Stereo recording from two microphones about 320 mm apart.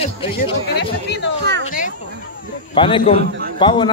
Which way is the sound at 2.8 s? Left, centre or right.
Centre.